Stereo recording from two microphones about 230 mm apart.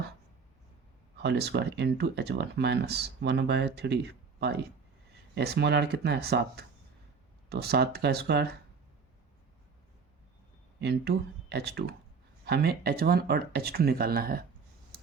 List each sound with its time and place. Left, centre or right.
1.1 s speech: right
10.8 s speech: right